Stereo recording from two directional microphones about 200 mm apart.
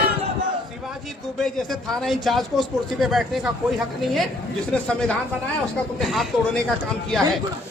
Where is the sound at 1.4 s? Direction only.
Centre (ahead or behind).